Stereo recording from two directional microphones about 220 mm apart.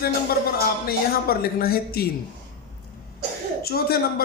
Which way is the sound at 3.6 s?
45° left (ahead or behind).